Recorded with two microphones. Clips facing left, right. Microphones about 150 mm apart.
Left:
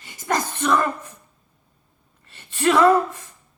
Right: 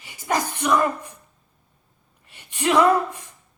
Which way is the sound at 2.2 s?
15° right (ahead or behind).